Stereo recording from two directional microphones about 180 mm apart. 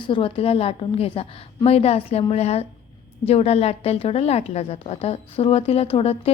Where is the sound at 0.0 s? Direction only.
30° left (ahead or behind).